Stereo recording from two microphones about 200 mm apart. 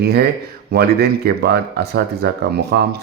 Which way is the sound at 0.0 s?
55° right (ahead or behind).